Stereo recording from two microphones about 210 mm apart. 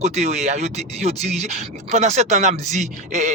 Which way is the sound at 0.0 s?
30° right (ahead or behind).